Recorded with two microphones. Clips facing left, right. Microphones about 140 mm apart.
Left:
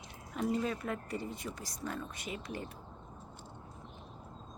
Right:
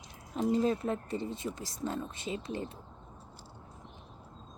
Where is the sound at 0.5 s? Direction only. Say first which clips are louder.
Right 8 dB; 30° right (ahead or behind).